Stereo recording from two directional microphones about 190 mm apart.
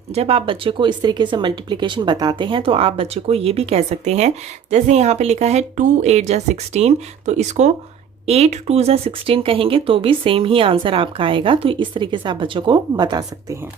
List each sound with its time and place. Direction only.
0.1 s speech: 30° right (ahead or behind)